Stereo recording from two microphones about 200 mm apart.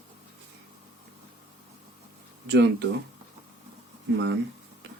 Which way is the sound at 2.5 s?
60° right (ahead or behind).